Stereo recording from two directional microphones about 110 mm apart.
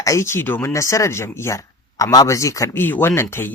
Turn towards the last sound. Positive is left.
turn(degrees=20)  # may be behind; listen again after turning